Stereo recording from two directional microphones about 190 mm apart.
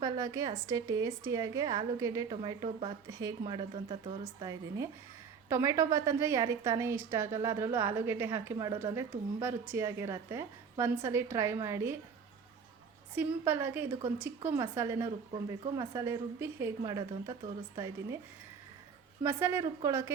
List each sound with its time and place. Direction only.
0.0 s a woman's voice: 20° right (ahead or behind)
13.1 s a woman's voice: 10° right (ahead or behind)
19.2 s a woman's voice: 15° right (ahead or behind)